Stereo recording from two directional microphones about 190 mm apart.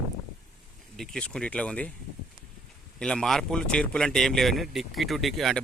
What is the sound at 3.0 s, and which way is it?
Speech, 5° left (ahead or behind).